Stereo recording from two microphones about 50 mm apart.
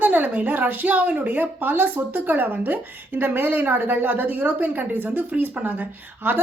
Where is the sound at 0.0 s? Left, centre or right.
Right.